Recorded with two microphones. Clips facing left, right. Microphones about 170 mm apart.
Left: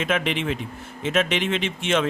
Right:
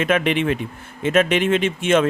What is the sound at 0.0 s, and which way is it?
Speech, 55° right (ahead or behind).